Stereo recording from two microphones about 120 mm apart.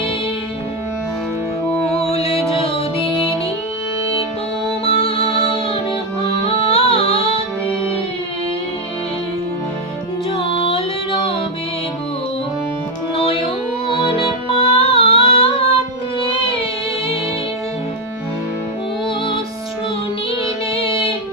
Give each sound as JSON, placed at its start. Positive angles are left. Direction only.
{"t": 1.9, "sound": "music", "side_deg": 60}
{"t": 4.9, "sound": "music", "side_deg": 50}
{"t": 10.3, "sound": "music", "side_deg": 50}
{"t": 13.1, "sound": "music", "side_deg": 55}
{"t": 20.7, "sound": "music", "side_deg": 50}